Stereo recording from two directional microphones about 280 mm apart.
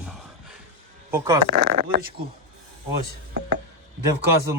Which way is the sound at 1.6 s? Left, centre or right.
Right.